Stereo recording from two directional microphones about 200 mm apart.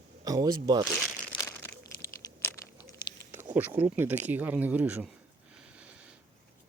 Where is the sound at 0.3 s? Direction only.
15° right (ahead or behind).